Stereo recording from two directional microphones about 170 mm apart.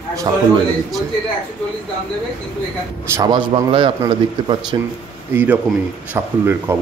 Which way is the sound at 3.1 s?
25° right (ahead or behind).